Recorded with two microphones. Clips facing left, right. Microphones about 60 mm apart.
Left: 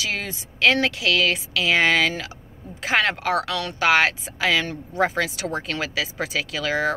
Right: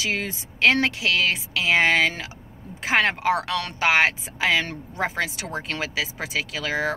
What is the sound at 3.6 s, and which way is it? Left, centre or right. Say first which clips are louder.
Speech: left 1 dB; right.